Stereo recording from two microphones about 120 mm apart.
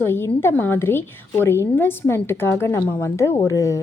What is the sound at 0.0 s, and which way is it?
A woman's voice, 20° left (ahead or behind).